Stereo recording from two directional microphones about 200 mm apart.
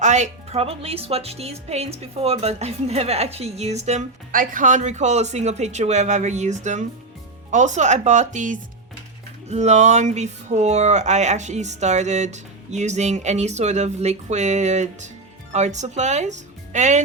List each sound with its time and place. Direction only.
0.0 s speech: 35° right (ahead or behind)